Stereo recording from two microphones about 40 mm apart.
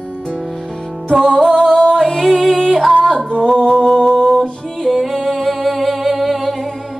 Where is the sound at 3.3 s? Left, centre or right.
Left; by 6.5 s centre.